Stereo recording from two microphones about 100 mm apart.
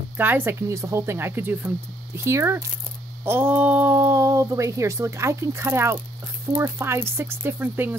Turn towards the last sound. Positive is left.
turn(degrees=-20)  # may be behind; listen again after turning